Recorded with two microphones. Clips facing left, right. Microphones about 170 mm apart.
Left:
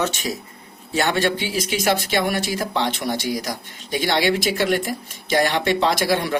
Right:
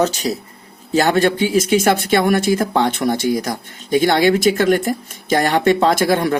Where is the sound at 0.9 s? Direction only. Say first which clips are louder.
Right 6 dB; 40° right (ahead or behind).